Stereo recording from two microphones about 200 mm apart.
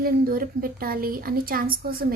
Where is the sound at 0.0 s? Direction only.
45° right (ahead or behind).